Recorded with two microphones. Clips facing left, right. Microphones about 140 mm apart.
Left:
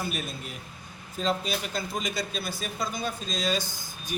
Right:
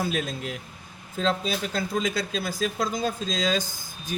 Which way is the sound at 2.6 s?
90° right.